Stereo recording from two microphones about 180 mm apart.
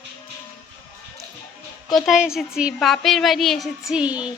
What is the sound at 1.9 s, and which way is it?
A woman's voice, centre (ahead or behind).